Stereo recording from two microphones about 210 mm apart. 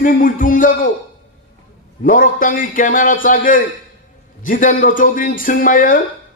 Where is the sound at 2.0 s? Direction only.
40° left (ahead or behind).